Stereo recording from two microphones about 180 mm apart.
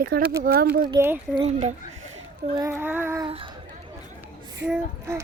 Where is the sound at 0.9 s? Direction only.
15° right (ahead or behind).